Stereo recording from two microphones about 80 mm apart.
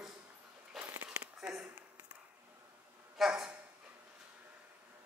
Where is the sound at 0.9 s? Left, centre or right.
Right.